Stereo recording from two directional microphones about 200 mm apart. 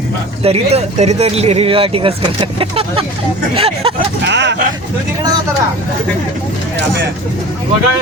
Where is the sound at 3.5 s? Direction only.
30° right (ahead or behind).